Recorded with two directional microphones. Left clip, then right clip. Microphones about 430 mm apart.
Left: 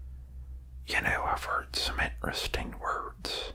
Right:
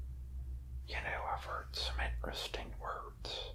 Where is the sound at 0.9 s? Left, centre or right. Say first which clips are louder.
Left 11 dB; centre.